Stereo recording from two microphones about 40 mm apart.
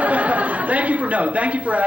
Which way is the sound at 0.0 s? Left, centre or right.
Right.